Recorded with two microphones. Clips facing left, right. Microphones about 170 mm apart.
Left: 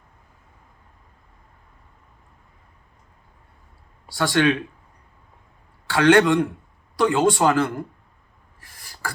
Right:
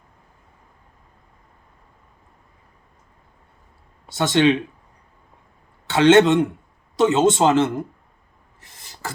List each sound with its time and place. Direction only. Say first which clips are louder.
4.1 s speech: right 3 dB; 20° right (ahead or behind)
5.9 s speech: right 2 dB; 25° right (ahead or behind)
8.6 s a sound: even; 20° right (ahead or behind)